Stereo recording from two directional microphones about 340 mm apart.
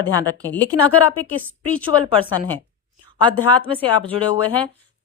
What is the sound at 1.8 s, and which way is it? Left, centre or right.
Speech, centre.